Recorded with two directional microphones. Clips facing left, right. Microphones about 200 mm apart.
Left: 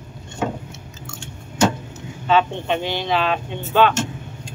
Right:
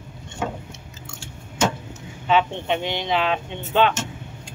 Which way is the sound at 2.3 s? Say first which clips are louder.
Left 2 dB; 20° right (ahead or behind).